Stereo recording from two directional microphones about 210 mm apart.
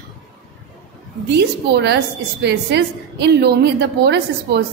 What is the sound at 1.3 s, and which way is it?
A woman's voice, 55° right (ahead or behind).